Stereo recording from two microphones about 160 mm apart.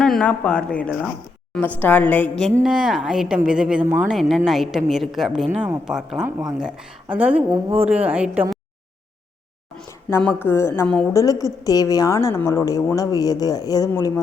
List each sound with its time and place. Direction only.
0.0 s a woman's voice: 5° left (ahead or behind); by 7.4 s 10° right (ahead or behind)
7.5 s speech: 35° right (ahead or behind)
7.9 s a woman's voice: 10° right (ahead or behind)
10.1 s a woman's voice: 15° left (ahead or behind)